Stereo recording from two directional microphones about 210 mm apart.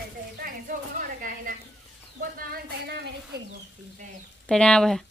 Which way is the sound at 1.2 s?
40° right (ahead or behind).